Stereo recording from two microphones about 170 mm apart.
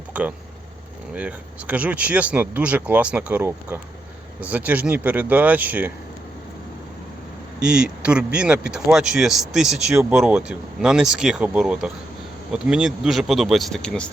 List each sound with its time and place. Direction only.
0.1 s speech: 10° right (ahead or behind)
7.6 s speech: 5° right (ahead or behind)